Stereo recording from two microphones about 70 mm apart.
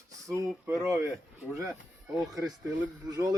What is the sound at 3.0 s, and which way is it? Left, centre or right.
Speech, right.